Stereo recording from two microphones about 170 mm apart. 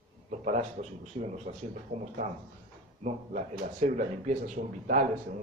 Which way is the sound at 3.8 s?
45° right (ahead or behind).